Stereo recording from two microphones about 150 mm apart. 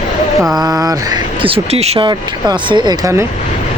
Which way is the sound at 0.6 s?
25° right (ahead or behind).